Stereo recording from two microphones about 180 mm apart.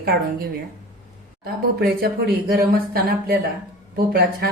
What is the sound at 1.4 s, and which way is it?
Speech, 60° right (ahead or behind).